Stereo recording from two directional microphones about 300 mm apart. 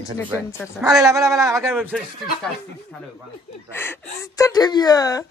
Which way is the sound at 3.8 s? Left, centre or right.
Centre.